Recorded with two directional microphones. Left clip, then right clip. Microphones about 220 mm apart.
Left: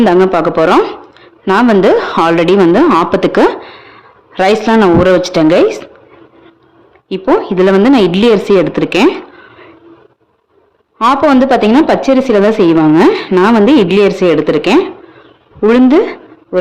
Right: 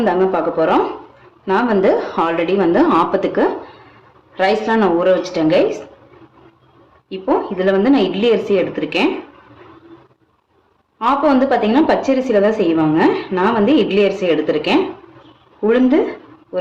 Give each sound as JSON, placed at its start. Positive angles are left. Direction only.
{"t": 0.0, "sound": "a woman's voice", "side_deg": 50}
{"t": 7.1, "sound": "a woman's voice", "side_deg": 50}
{"t": 10.9, "sound": "a woman's voice", "side_deg": 50}